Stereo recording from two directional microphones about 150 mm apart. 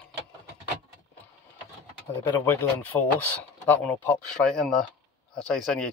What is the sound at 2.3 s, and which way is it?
Speech, 15° left (ahead or behind).